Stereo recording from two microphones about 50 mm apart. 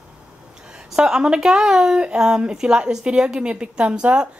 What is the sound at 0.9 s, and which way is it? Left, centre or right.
A woman's voice, centre.